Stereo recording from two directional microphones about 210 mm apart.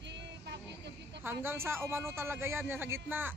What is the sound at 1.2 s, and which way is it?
A man's voice, 10° right (ahead or behind).